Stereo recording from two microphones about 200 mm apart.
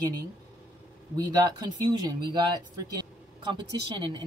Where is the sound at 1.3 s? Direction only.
20° right (ahead or behind).